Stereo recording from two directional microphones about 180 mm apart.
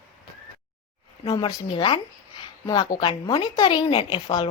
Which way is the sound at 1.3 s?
25° left (ahead or behind).